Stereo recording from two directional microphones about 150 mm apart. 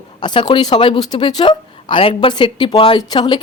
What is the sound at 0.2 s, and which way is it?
Speech, 30° left (ahead or behind).